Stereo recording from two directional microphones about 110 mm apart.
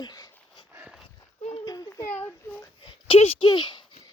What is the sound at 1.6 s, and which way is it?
Children playing, 35° left (ahead or behind).